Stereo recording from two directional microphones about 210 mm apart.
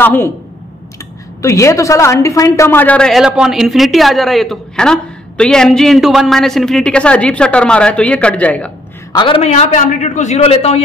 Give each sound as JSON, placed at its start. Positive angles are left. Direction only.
{"t": 0.0, "sound": "speech", "side_deg": 10}
{"t": 1.4, "sound": "a woman's voice", "side_deg": 15}
{"t": 9.1, "sound": "a man's voice", "side_deg": 25}